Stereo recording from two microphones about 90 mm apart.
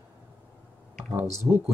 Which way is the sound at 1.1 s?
30° right (ahead or behind).